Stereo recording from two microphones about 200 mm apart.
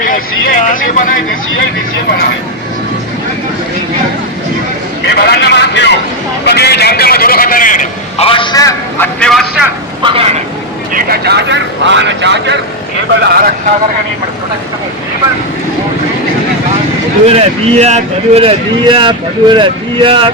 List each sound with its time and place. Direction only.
0.7 s speech: 45° left (ahead or behind)
5.0 s a man's voice: 55° left (ahead or behind)
8.3 s a man's voice: 20° left (ahead or behind)
9.2 s a man's voice: centre (ahead or behind)
10.0 s a man's voice: 25° right (ahead or behind)
10.9 s speech: 50° right (ahead or behind)
13.2 s speech: 50° right (ahead or behind)
17.2 s a man's voice: 30° right (ahead or behind)